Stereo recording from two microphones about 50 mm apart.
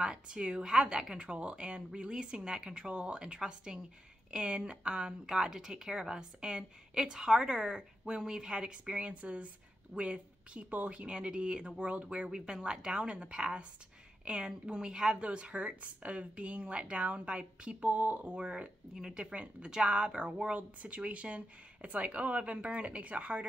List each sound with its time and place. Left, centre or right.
0.0 s a woman's voice: centre; by 18.4 s right
18.4 s a woman's voice: right
19.2 s a woman's voice: right